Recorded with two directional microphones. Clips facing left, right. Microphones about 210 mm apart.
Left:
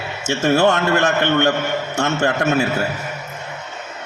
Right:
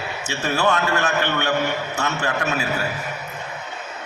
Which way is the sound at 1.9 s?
45° left (ahead or behind).